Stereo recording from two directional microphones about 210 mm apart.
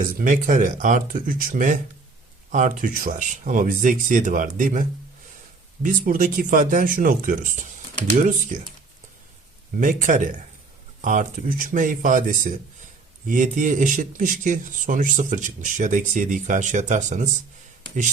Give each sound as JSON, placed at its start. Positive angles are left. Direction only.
{"t": 0.2, "sound": "speech", "side_deg": -40}
{"t": 9.8, "sound": "speech", "side_deg": -40}